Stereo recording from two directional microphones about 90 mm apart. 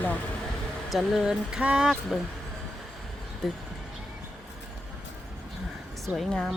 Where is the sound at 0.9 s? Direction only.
Centre (ahead or behind).